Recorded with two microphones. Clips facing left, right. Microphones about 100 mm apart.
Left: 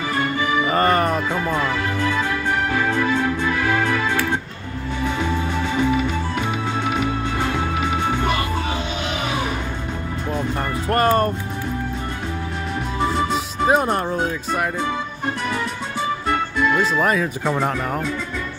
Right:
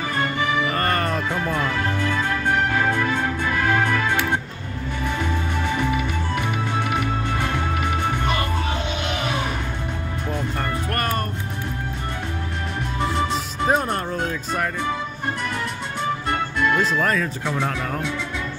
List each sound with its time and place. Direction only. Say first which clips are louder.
0.7 s music: left 5 dB; 20° left (ahead or behind)
2.9 s music: left 2 dB; 50° right (ahead or behind)
5.6 s music: left 3 dB; 55° right (ahead or behind)
8.1 s music: left 3 dB; 55° left (ahead or behind)
10.9 s speech: left 11 dB; 20° left (ahead or behind)
13.2 s speech: left 3 dB; 5° left (ahead or behind)
16.6 s speech: left 1 dB; centre (ahead or behind)